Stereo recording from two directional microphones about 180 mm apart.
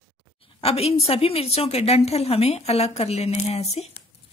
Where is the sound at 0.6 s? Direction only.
35° left (ahead or behind).